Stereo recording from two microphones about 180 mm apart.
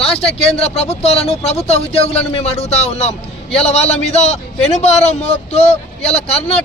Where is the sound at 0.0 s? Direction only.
35° left (ahead or behind).